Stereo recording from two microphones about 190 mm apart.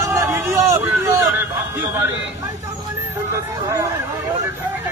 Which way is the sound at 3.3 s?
15° right (ahead or behind).